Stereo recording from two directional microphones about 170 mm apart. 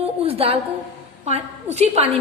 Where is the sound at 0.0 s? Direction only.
35° right (ahead or behind).